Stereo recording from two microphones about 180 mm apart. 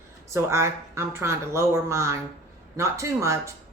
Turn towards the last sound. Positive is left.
turn(degrees=-15)  # may be behind; listen again after turning